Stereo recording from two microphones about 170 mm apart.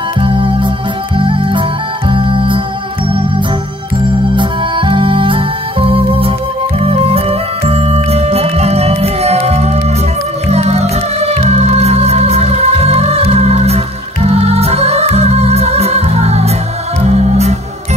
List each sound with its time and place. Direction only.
0.2 s music: 30° right (ahead or behind)
4.4 s music: 30° right (ahead or behind)